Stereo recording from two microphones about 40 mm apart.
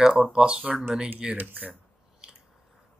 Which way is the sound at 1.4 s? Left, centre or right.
Right.